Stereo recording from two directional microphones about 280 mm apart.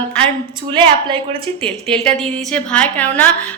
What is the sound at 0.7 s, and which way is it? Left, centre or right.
Speech, centre.